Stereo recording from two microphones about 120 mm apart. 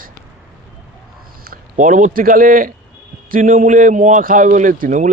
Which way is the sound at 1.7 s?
90° right.